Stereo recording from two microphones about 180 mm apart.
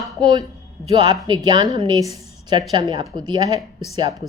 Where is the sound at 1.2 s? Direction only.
25° right (ahead or behind).